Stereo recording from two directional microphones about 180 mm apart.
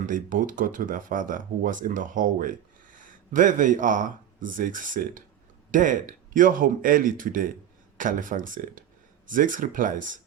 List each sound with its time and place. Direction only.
0.0 s speech: 45° right (ahead or behind)